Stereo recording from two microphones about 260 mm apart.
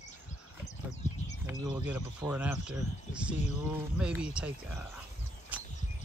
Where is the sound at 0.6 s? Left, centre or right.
Left.